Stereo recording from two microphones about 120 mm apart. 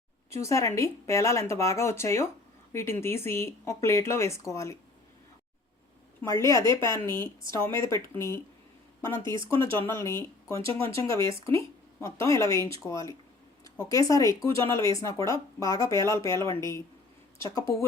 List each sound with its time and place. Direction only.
0.3 s speech: 25° left (ahead or behind)
6.2 s speech: 25° left (ahead or behind)